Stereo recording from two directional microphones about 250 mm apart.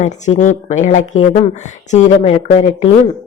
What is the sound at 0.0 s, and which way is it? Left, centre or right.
Speech, left.